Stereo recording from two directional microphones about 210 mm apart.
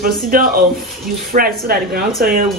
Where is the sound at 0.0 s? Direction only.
45° right (ahead or behind).